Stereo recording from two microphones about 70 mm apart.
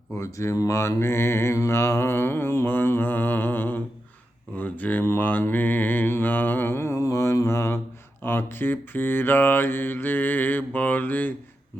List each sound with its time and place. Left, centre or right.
0.2 s speech: left
0.8 s mantra: left